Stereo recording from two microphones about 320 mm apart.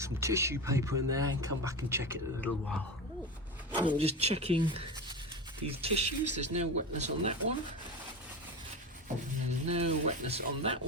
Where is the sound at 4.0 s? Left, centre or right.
Centre.